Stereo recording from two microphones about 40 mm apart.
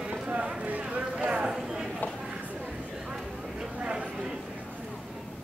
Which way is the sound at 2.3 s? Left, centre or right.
Right.